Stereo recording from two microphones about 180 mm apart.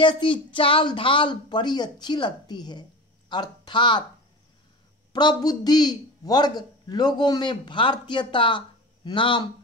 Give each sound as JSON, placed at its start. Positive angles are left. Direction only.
{"t": 0.0, "sound": "speech", "side_deg": 25}
{"t": 5.1, "sound": "speech", "side_deg": 20}